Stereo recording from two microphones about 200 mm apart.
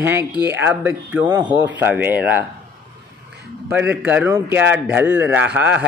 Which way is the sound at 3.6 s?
10° right (ahead or behind).